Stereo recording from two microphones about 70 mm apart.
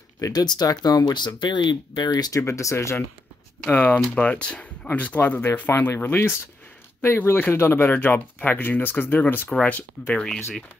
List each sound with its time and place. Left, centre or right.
0.2 s speech: left
2.4 s speech: left
3.7 s speech: left